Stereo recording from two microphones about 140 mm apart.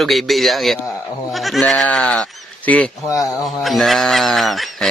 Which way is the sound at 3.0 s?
25° left (ahead or behind).